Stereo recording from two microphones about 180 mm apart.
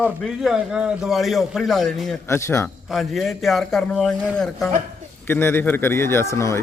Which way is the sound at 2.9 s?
Centre (ahead or behind).